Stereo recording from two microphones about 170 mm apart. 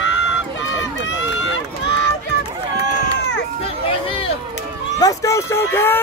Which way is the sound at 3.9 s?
35° left (ahead or behind).